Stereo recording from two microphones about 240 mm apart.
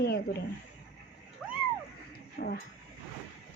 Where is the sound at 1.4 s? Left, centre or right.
Centre.